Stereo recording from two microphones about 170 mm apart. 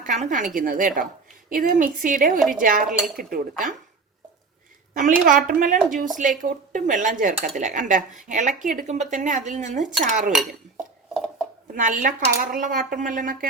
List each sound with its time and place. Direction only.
0.0 s speech: 45° right (ahead or behind)
5.2 s speech: 50° right (ahead or behind)
11.7 s speech: 50° right (ahead or behind)